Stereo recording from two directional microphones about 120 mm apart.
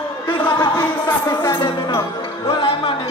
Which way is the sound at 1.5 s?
45° left (ahead or behind).